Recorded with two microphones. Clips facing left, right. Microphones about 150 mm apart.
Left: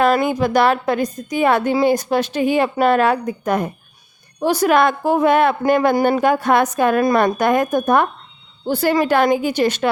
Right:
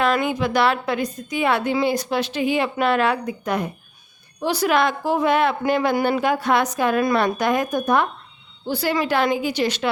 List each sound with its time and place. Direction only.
0.0 s a woman's voice: 40° left (ahead or behind)